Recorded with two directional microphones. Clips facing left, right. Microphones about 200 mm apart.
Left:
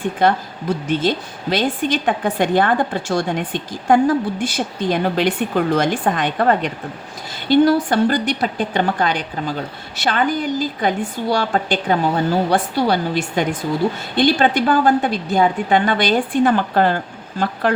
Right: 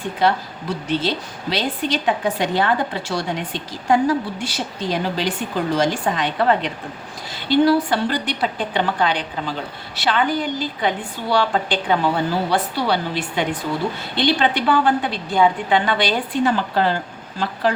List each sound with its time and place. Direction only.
0.2 s a woman's voice: 50° left (ahead or behind)